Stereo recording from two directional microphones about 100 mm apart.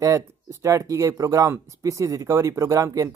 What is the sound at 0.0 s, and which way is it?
Speech, 30° right (ahead or behind).